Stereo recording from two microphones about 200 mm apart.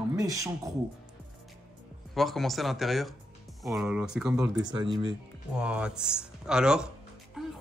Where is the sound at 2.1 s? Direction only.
Centre (ahead or behind).